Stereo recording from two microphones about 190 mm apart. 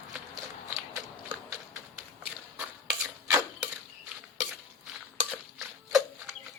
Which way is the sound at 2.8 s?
15° right (ahead or behind).